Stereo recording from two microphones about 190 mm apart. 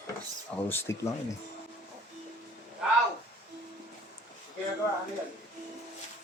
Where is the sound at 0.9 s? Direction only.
15° left (ahead or behind).